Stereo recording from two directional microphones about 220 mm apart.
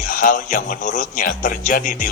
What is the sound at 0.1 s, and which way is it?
Speech, 40° left (ahead or behind).